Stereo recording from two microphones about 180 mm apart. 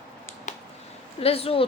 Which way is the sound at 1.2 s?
35° left (ahead or behind).